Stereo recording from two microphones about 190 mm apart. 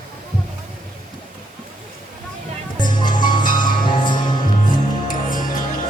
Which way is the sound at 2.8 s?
25° left (ahead or behind).